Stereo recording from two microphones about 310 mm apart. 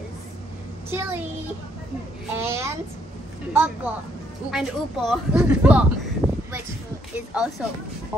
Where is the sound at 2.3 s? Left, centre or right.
Centre.